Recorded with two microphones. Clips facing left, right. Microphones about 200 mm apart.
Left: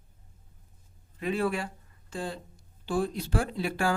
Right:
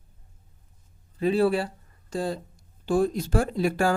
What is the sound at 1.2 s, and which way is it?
Speech, 35° right (ahead or behind).